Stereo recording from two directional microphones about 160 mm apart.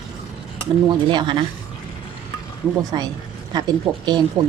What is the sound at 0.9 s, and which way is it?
Speech, 30° right (ahead or behind).